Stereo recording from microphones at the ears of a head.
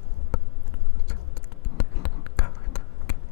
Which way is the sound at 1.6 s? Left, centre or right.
Left.